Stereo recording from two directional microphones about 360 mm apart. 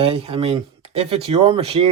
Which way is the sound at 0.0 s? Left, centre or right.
Centre.